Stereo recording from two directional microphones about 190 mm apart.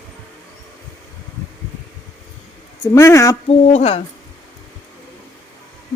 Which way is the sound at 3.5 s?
35° left (ahead or behind).